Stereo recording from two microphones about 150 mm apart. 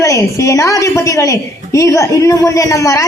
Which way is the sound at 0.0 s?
20° left (ahead or behind).